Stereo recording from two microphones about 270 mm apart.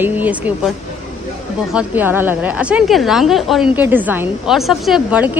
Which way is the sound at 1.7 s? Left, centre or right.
Centre.